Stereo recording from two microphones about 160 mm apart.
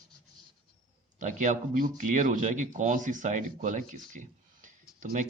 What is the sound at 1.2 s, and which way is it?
Speech, 50° right (ahead or behind).